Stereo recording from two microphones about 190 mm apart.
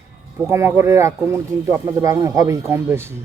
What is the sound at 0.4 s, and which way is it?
A man's voice, 15° right (ahead or behind).